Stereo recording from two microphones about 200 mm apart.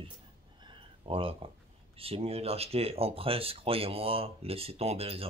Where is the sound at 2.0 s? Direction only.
30° right (ahead or behind).